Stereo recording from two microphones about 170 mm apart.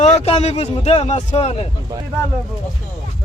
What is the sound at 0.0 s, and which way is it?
A man's voice, 40° left (ahead or behind).